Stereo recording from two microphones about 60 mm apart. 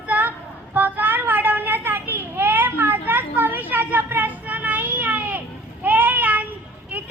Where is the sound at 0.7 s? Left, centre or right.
Right.